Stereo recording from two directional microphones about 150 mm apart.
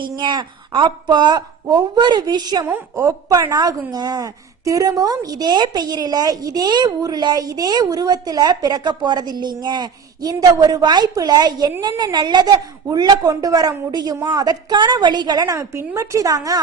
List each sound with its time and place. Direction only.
0.2 s a woman's voice: 30° right (ahead or behind)
2.6 s a woman's voice: 15° right (ahead or behind)